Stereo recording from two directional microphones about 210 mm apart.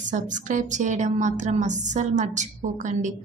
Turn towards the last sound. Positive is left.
turn(degrees=-35)  # may be behind; listen again after turning